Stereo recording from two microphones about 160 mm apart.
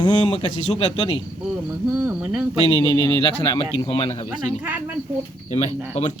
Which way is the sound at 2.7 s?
30° left (ahead or behind).